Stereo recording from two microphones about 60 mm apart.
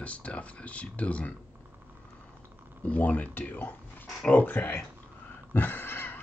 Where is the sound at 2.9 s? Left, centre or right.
Left.